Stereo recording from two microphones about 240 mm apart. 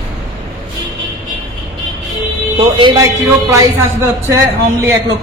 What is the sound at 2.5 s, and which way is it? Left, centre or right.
A woman's voice, centre.